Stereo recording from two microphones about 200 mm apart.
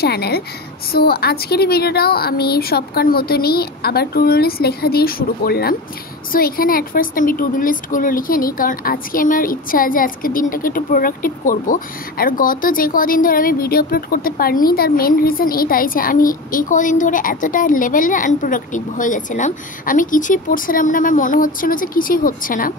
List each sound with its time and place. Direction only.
0.0 s a woman's voice: 55° left (ahead or behind)